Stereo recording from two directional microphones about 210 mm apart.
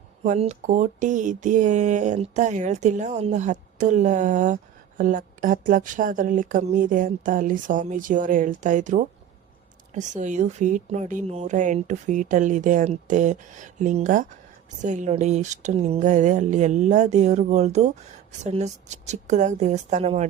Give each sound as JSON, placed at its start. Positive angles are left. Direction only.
{"t": 0.3, "sound": "speech", "side_deg": -35}